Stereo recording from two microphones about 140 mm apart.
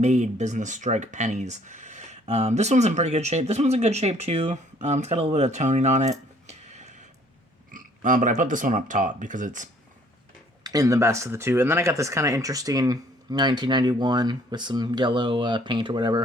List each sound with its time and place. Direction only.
0.0 s speech: 55° right (ahead or behind)
7.7 s speech: 70° right (ahead or behind)
10.6 s speech: 25° right (ahead or behind)